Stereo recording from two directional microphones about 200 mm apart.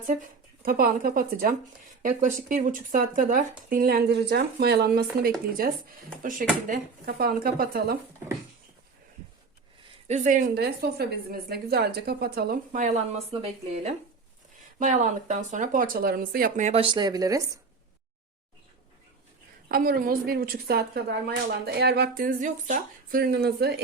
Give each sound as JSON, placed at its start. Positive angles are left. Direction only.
{"t": 0.6, "sound": "a woman's voice", "side_deg": -45}
{"t": 6.7, "sound": "a woman's voice", "side_deg": -50}
{"t": 10.1, "sound": "a woman's voice", "side_deg": -40}
{"t": 13.3, "sound": "speech", "side_deg": -30}
{"t": 19.6, "sound": "a woman's voice", "side_deg": -45}
{"t": 23.2, "sound": "a woman's voice", "side_deg": -55}